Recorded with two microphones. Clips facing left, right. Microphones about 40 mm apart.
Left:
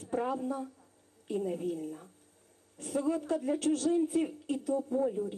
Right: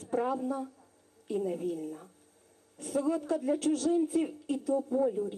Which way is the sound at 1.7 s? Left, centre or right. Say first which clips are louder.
Right 1 dB; right.